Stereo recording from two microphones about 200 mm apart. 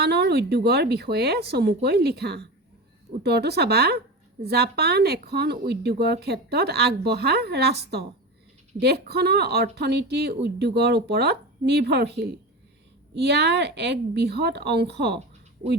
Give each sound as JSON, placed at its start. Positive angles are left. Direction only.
{"t": 0.0, "sound": "speech", "side_deg": -55}